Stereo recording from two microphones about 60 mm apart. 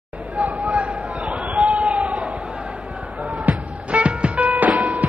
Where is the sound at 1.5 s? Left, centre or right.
Centre.